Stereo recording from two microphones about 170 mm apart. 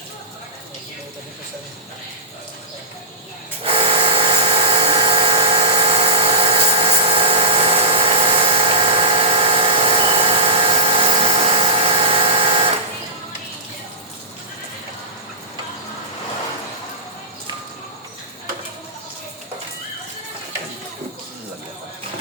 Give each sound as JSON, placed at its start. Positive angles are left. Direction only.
{"t": 3.6, "sound": "dental drill", "side_deg": -35}